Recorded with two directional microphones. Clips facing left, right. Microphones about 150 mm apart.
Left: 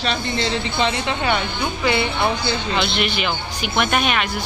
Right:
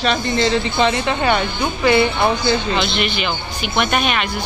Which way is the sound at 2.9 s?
5° left (ahead or behind).